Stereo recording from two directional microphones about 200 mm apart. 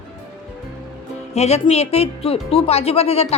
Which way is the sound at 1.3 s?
30° left (ahead or behind).